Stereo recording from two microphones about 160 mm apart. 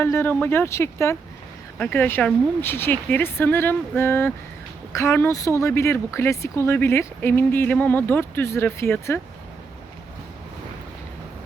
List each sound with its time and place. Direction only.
0.0 s speech: 15° left (ahead or behind)